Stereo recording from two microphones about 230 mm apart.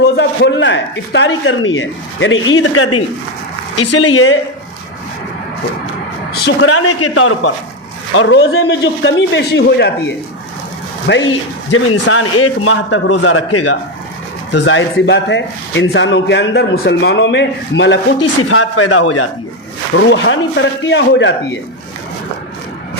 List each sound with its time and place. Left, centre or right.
0.0 s speech: left
6.4 s a man's voice: left
14.5 s a man's voice: left
18.5 s speech: left
19.9 s a man's voice: left